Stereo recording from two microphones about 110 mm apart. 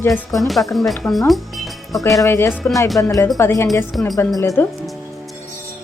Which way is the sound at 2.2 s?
30° left (ahead or behind).